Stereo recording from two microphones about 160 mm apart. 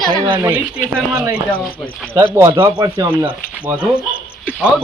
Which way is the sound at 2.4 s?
20° right (ahead or behind).